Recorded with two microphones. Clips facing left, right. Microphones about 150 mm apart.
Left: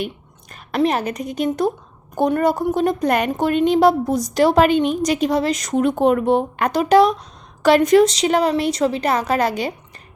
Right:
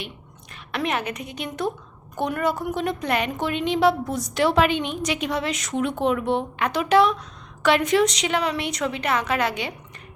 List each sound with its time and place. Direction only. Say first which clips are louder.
0.7 s a woman's voice: left 7 dB; 35° left (ahead or behind)